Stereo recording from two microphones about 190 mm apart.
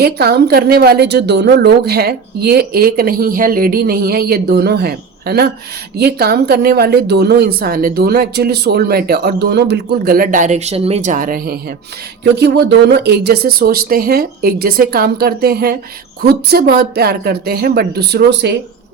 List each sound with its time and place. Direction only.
0.0 s speech: 55° right (ahead or behind)
12.2 s speech: 65° right (ahead or behind)